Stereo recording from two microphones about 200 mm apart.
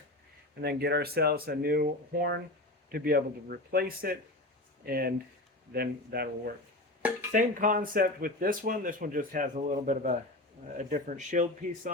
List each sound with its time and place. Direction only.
0.6 s speech: 55° right (ahead or behind)